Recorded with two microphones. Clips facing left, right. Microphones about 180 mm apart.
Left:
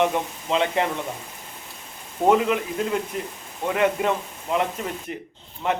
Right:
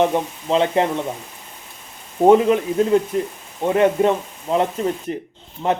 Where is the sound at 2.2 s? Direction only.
30° right (ahead or behind).